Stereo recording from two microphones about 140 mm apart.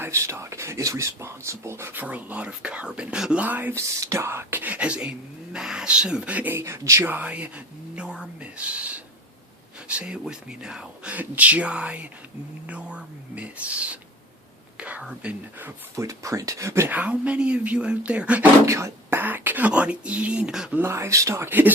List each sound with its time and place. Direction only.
0.0 s speech: 20° right (ahead or behind)
18.6 s speech: 20° right (ahead or behind)
20.8 s speech: 20° right (ahead or behind)